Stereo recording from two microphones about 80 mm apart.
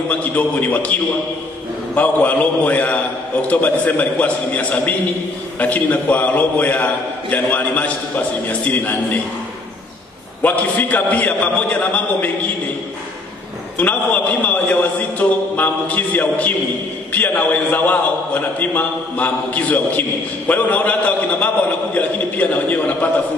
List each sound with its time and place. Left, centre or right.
0.1 s a man's voice: centre
2.0 s a man's voice: left
10.4 s a man's voice: left
13.7 s a man's voice: centre